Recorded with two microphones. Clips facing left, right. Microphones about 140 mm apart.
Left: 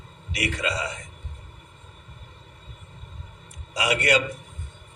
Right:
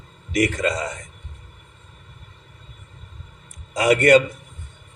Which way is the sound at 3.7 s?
50° right (ahead or behind).